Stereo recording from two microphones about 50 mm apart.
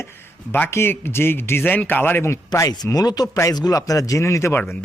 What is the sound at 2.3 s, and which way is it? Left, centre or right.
A man's voice, left.